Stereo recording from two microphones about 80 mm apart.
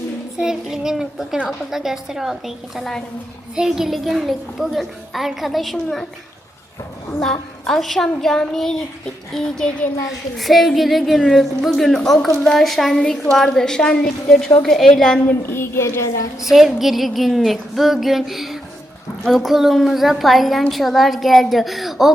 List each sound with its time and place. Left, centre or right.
0.3 s a woman's voice: centre
7.2 s a woman's voice: centre
15.2 s a woman's voice: left
16.4 s a woman's voice: centre